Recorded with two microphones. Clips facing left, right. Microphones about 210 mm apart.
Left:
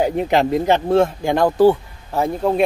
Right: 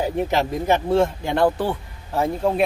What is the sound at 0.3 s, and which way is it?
Speech, 60° left (ahead or behind).